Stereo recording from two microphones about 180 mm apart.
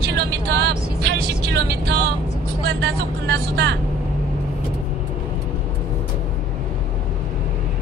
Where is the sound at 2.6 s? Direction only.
65° right (ahead or behind).